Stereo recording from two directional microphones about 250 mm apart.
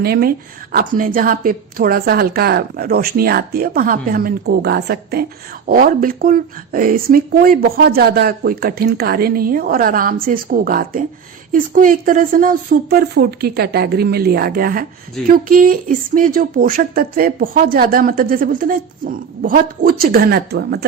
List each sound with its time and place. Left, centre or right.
0.0 s speech: right